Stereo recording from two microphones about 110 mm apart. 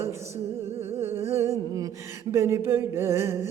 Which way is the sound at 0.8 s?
20° right (ahead or behind).